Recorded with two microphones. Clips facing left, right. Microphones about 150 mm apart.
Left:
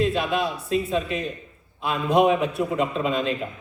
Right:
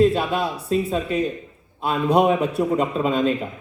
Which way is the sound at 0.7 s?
35° right (ahead or behind).